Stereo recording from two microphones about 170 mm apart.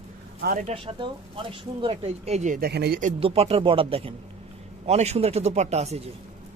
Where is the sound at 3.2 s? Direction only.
35° right (ahead or behind).